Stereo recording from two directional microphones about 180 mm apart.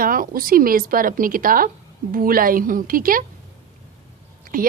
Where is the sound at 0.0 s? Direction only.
50° right (ahead or behind).